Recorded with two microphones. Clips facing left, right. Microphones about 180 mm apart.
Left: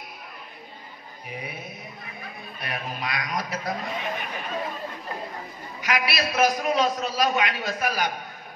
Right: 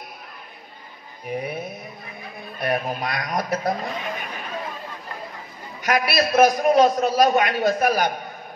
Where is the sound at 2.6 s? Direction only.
45° right (ahead or behind).